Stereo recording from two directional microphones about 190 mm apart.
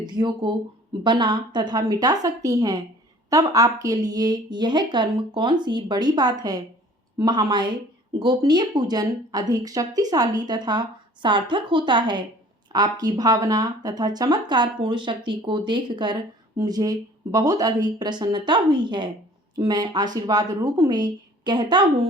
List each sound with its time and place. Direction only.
0.0 s a woman's voice: 25° right (ahead or behind)